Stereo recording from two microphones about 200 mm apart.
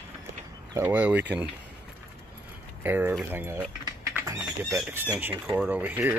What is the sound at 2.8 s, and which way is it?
Speech, 10° right (ahead or behind).